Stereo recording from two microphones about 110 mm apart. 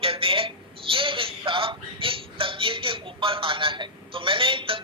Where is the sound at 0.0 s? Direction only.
60° right (ahead or behind).